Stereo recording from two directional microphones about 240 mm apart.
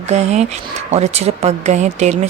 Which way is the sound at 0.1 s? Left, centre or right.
Right.